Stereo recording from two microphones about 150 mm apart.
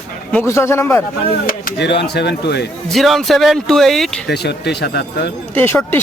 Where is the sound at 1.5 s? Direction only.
80° left.